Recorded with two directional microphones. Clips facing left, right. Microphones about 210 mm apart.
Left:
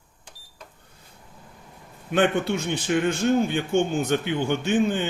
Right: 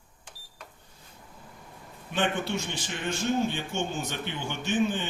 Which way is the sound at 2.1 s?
55° left (ahead or behind).